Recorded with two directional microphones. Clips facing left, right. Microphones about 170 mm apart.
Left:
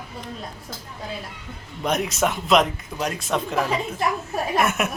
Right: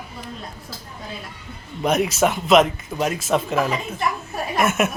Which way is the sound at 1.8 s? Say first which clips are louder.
Right 4 dB; 5° right (ahead or behind).